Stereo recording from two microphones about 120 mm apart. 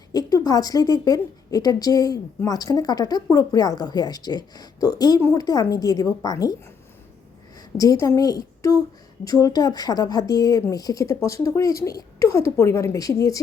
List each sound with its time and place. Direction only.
0.1 s a woman's voice: 30° left (ahead or behind)
7.8 s a woman's voice: 30° left (ahead or behind)